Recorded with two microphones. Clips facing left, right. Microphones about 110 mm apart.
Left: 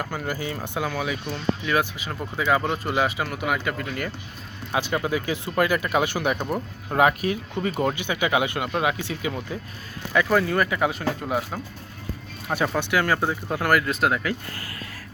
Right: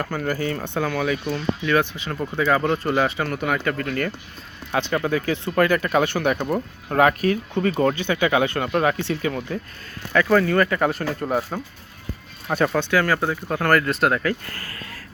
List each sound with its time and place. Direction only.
0.0 s speech: 5° left (ahead or behind)
14.2 s speech: 15° left (ahead or behind)